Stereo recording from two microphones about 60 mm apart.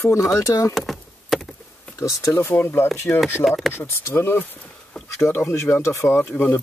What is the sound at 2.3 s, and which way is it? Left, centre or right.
Speech, left.